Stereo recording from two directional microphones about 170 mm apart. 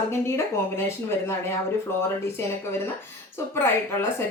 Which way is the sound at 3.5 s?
15° left (ahead or behind).